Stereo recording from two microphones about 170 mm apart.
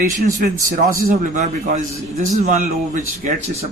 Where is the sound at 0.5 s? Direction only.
20° right (ahead or behind).